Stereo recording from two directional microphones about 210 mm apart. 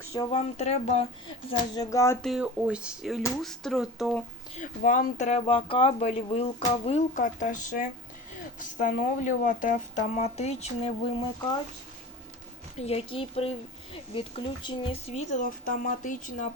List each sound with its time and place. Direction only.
0.1 s speech: 25° left (ahead or behind)
1.5 s speech: 20° left (ahead or behind)
2.2 s speech: 5° right (ahead or behind)
4.5 s speech: 40° left (ahead or behind)
12.8 s speech: 25° left (ahead or behind)